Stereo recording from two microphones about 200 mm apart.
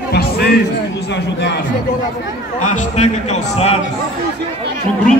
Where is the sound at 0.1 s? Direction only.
55° left (ahead or behind).